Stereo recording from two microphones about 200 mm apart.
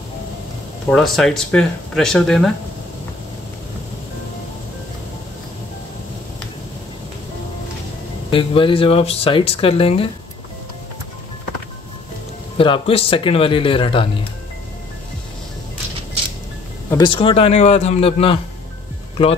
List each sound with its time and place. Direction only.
0.8 s speech: centre (ahead or behind)
8.3 s speech: 25° left (ahead or behind)
12.5 s speech: 25° left (ahead or behind)
16.9 s speech: 25° left (ahead or behind)